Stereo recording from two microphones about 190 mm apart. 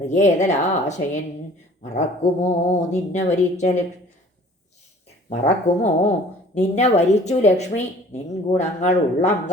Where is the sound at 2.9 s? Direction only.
40° left (ahead or behind).